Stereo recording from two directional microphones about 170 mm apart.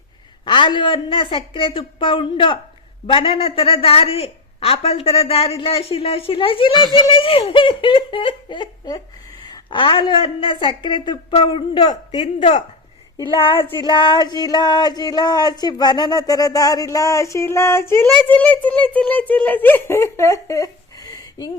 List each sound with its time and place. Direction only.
0.4 s a woman's voice: 30° left (ahead or behind)
7.0 s a sound: 30° left (ahead or behind); by 18.9 s 10° left (ahead or behind)
18.9 s speech: 10° left (ahead or behind)